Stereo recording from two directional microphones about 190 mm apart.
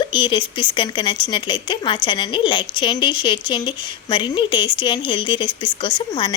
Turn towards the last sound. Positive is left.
turn(degrees=25)  # may be behind; listen again after turning